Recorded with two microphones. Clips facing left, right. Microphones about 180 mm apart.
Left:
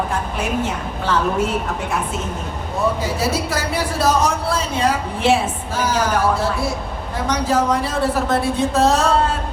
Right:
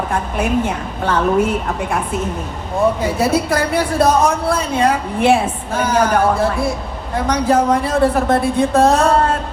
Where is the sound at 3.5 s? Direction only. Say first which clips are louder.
Right 5 dB; 55° right (ahead or behind).